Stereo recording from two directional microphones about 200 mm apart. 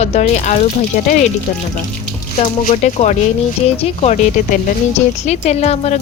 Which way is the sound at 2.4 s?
35° left (ahead or behind).